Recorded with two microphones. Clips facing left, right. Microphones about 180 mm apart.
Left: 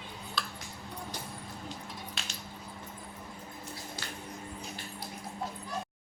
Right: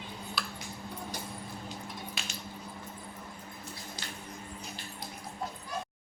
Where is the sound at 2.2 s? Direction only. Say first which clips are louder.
Right 1 dB; centre (ahead or behind).